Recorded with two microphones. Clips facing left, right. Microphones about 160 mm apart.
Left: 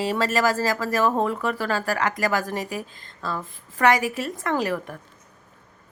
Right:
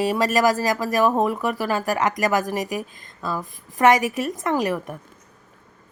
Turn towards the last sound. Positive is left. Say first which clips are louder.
# right 2 dB
turn(degrees=-15)  # may be behind; listen again after turning